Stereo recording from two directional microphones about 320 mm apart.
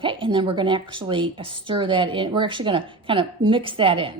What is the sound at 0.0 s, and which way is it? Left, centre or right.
Speech, centre.